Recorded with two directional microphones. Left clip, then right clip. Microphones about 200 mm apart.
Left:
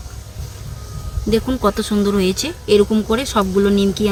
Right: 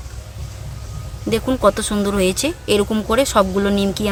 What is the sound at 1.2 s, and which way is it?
Speech, 45° right (ahead or behind).